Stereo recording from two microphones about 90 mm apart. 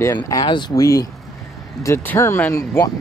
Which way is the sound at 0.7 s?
40° left (ahead or behind).